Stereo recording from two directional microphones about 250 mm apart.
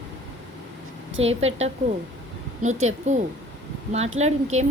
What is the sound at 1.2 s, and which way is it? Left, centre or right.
Speech, right.